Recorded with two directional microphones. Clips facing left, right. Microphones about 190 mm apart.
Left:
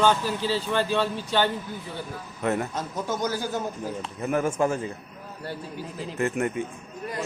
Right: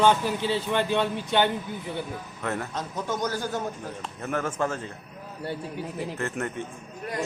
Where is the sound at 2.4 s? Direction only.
20° left (ahead or behind).